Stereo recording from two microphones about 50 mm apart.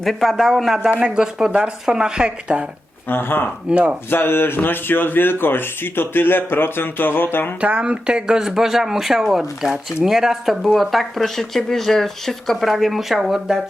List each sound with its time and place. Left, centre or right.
0.0 s speech: centre
0.8 s speech: centre
3.1 s speech: left
3.7 s speech: right
4.1 s speech: left
7.6 s speech: right; by 13.6 s centre